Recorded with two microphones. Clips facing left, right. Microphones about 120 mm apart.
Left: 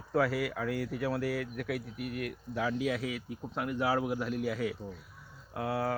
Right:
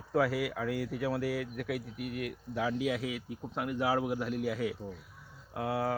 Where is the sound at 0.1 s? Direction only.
10° right (ahead or behind).